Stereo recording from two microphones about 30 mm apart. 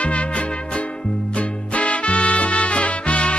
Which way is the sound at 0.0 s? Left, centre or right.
Left.